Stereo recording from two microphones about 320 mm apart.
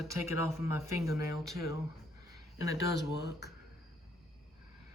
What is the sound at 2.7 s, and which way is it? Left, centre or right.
Speech, left.